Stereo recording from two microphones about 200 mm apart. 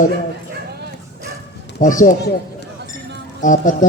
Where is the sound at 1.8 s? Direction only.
40° left (ahead or behind).